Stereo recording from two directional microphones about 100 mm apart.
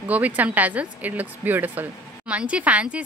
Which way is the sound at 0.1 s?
15° right (ahead or behind).